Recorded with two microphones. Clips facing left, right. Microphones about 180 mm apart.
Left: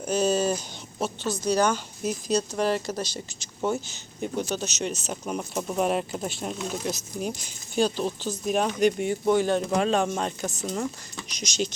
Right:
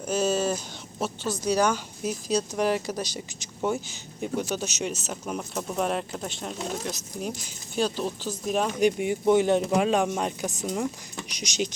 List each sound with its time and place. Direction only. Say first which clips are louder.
0.0 s speech: left 1 dB; 5° right (ahead or behind)
4.2 s speech: even; 10° right (ahead or behind)
5.3 s speech: left 2 dB; 5° left (ahead or behind)
9.3 s speech: right 2 dB; 20° right (ahead or behind)
9.6 s speech: right 1 dB; 10° right (ahead or behind)